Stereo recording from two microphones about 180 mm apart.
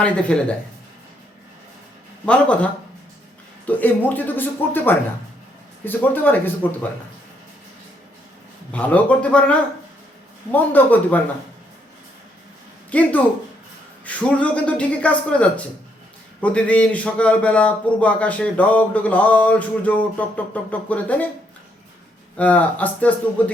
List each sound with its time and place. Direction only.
0.0 s a man's voice: 5° left (ahead or behind)
2.2 s a man's voice: 5° left (ahead or behind)
3.7 s a man's voice: 10° left (ahead or behind)
8.7 s a man's voice: 10° left (ahead or behind)
12.9 s a man's voice: 10° left (ahead or behind)
22.4 s a man's voice: 10° left (ahead or behind)